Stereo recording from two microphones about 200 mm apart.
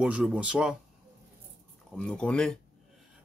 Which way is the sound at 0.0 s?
5° right (ahead or behind).